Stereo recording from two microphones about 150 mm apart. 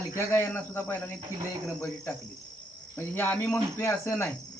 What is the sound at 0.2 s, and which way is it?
Speech, 15° left (ahead or behind).